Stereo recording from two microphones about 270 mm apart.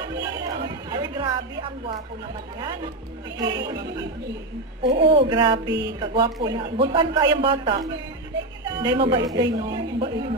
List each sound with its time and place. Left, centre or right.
0.0 s a woman's voice: centre
3.3 s a man's voice: centre
4.8 s a man's voice: centre